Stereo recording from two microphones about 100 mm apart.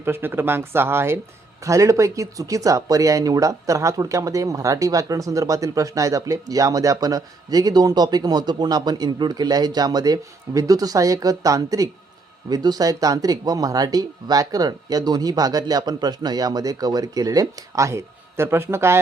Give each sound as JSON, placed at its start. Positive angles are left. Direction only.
{"t": 0.0, "sound": "speech", "side_deg": -20}